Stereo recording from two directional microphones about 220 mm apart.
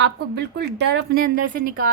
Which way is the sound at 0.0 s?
50° right (ahead or behind).